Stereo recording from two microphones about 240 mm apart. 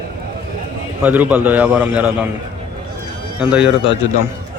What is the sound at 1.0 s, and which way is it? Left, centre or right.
A man's voice, centre.